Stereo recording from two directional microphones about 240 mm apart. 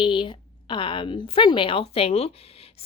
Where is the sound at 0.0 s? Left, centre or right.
Centre.